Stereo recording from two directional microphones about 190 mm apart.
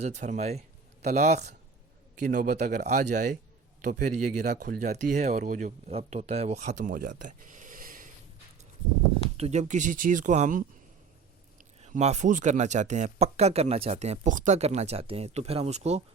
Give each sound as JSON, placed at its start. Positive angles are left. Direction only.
{"t": 0.0, "sound": "speech", "side_deg": -35}
{"t": 4.8, "sound": "speech", "side_deg": -40}
{"t": 5.9, "sound": "speech", "side_deg": -30}
{"t": 9.4, "sound": "speech", "side_deg": -35}